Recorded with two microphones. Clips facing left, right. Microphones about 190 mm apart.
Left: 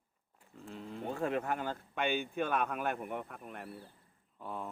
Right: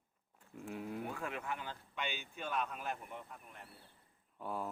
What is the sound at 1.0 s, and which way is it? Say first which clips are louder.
Speech: left 8 dB; 35° left (ahead or behind).